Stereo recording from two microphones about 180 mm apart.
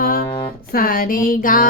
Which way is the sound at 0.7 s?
50° left (ahead or behind).